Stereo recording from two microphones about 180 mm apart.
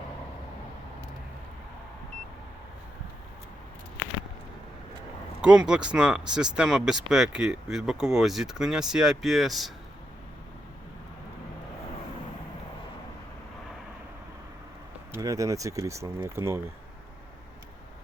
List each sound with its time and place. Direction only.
5.4 s speech: 5° right (ahead or behind)
15.1 s speech: 20° right (ahead or behind)